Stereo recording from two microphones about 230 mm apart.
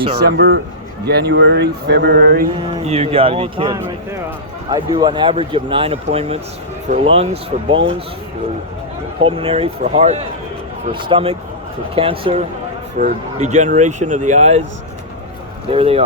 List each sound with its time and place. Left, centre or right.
0.3 s speech: right
2.6 s speech: right
9.2 s speech: right
15.7 s speech: right